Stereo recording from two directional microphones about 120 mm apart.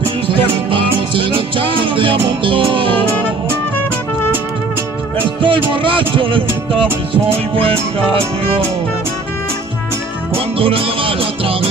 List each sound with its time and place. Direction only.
0.3 s music: 45° right (ahead or behind)
5.4 s music: 45° right (ahead or behind)
7.5 s music: 50° right (ahead or behind)
10.6 s music: 50° right (ahead or behind)